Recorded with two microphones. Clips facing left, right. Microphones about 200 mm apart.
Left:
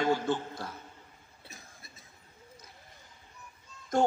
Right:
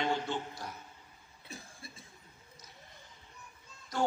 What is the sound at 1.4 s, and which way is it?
Cough, 30° right (ahead or behind).